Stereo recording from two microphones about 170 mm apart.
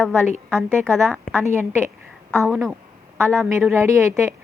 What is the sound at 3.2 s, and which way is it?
A woman's voice, 15° right (ahead or behind).